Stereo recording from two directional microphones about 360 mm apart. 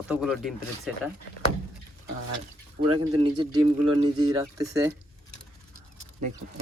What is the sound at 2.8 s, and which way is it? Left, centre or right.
Speech, centre.